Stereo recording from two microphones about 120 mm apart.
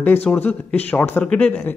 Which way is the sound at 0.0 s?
15° left (ahead or behind).